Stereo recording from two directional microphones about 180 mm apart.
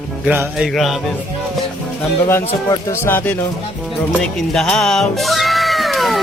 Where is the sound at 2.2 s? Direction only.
15° left (ahead or behind).